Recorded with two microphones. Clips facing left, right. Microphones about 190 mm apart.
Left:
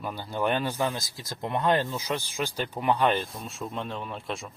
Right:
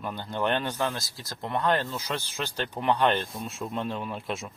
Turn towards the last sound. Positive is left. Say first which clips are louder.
# right 2 dB
turn(degrees=0)  # may be behind; listen again after turning